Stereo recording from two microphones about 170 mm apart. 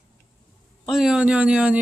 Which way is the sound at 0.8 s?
Centre (ahead or behind).